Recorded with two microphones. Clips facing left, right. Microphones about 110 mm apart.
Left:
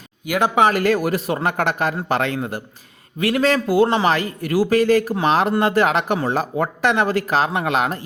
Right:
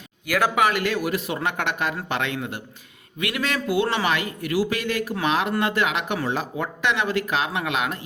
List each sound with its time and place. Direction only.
0.3 s a man's voice: 20° left (ahead or behind)